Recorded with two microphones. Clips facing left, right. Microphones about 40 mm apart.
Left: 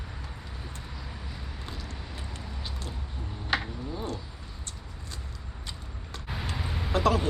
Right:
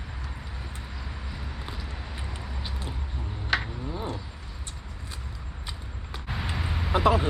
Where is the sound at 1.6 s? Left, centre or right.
Centre.